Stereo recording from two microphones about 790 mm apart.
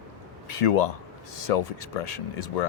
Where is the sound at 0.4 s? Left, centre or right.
Left.